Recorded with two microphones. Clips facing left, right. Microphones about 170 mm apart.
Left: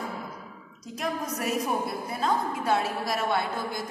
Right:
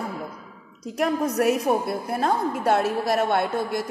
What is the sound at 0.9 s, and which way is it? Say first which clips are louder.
A woman's voice: right 9 dB; 60° right (ahead or behind).